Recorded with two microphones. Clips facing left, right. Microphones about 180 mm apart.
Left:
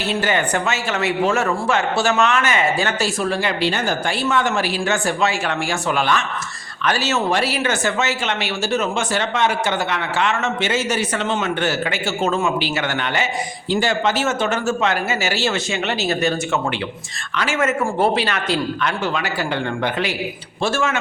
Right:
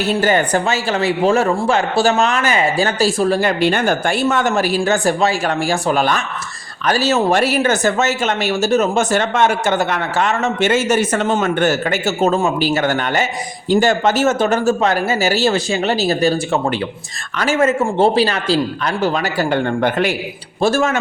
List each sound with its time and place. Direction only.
0.0 s speech: 40° right (ahead or behind)
20.6 s speech: 40° right (ahead or behind)